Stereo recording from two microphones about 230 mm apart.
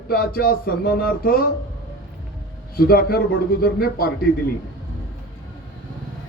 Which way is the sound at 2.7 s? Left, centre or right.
Left.